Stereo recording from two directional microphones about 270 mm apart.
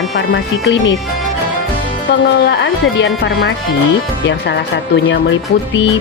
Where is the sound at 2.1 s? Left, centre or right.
Left.